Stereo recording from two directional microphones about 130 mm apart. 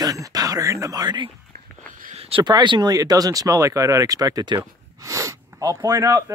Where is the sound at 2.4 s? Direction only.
35° right (ahead or behind).